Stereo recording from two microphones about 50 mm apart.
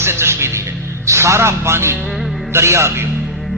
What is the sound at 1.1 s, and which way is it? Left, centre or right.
A man's voice, right.